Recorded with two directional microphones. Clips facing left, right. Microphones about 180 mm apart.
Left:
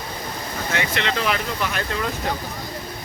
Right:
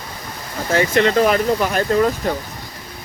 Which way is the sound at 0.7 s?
40° right (ahead or behind).